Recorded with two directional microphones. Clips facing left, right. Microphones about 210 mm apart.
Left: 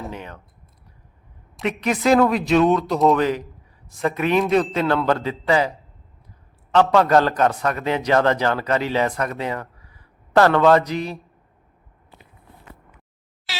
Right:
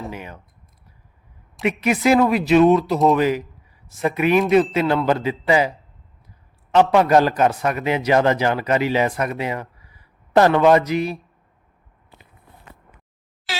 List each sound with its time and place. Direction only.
0.0 s speech: 10° right (ahead or behind)
1.6 s a man's voice: 10° right (ahead or behind)
6.9 s a man's voice: 15° right (ahead or behind)